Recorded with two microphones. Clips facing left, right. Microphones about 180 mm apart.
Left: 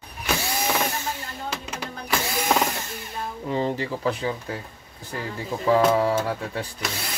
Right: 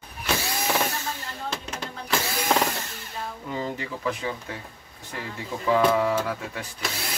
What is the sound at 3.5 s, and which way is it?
Speech, 30° left (ahead or behind).